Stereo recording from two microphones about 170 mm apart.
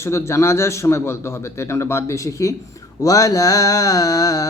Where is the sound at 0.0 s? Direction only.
15° left (ahead or behind).